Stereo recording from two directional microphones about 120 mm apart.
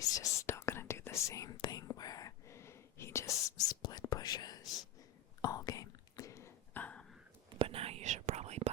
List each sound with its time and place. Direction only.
0.0 s whispering: 30° left (ahead or behind)
7.6 s whispering: 55° right (ahead or behind)